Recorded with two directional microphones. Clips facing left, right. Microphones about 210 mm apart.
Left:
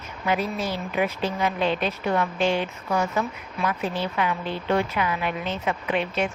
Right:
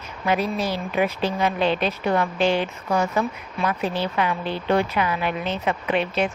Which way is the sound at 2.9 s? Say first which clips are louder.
Right 3 dB; 45° right (ahead or behind).